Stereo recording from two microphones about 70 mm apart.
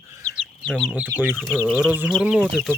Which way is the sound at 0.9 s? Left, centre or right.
Centre.